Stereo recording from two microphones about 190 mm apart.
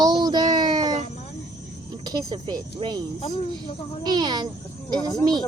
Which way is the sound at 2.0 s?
20° right (ahead or behind).